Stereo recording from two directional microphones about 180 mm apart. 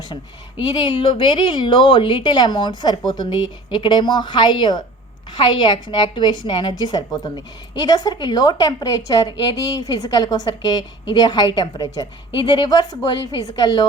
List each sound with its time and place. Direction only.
0.1 s a woman's voice: 25° left (ahead or behind)